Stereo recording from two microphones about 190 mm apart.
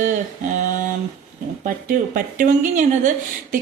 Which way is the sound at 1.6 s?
45° right (ahead or behind).